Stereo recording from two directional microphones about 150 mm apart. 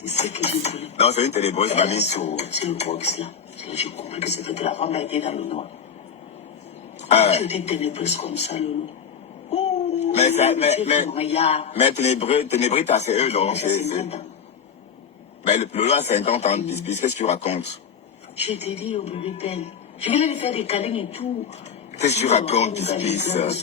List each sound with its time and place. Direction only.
0.2 s speech: 50° left (ahead or behind)
7.0 s speech: 45° left (ahead or behind)
15.4 s speech: 45° left (ahead or behind)
18.3 s speech: 10° right (ahead or behind)
18.6 s speech: 45° left (ahead or behind)